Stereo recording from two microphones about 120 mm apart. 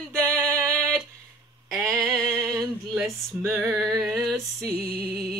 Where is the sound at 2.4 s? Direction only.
30° right (ahead or behind).